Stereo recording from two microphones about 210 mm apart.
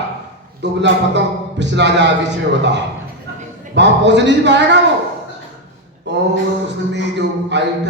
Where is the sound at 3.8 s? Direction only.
55° right (ahead or behind).